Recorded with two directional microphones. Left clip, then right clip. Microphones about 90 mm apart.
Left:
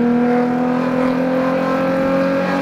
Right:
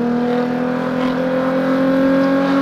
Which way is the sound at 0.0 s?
30° right (ahead or behind).